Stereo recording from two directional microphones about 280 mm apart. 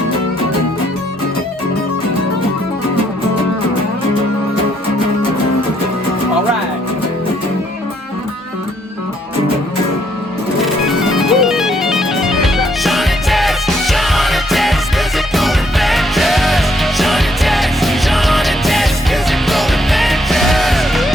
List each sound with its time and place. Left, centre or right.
10.6 s music: centre